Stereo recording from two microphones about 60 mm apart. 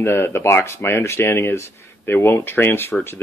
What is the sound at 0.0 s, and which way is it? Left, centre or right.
Speech, left.